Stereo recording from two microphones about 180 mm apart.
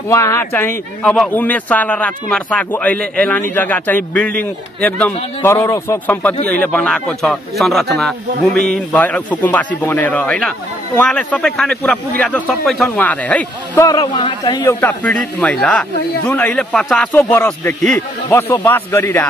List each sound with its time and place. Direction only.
0.1 s a man's voice: 15° left (ahead or behind)
13.9 s speech: 25° left (ahead or behind)